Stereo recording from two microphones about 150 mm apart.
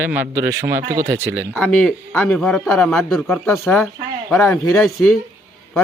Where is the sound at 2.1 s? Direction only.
10° left (ahead or behind).